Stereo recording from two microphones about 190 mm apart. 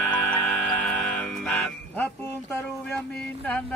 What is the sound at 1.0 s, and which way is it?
Music, 5° left (ahead or behind).